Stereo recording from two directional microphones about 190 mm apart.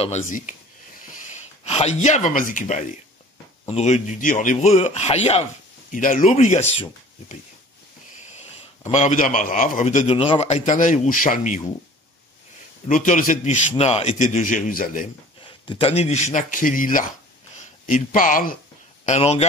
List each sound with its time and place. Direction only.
1.3 s a man's voice: 35° left (ahead or behind)
8.8 s a man's voice: 40° left (ahead or behind)
10.0 s a man's voice: 30° left (ahead or behind); by 11.6 s 45° left (ahead or behind)
12.8 s a man's voice: 45° left (ahead or behind)
15.4 s a man's voice: 30° left (ahead or behind); by 18.6 s 45° left (ahead or behind)
19.0 s a man's voice: 35° left (ahead or behind)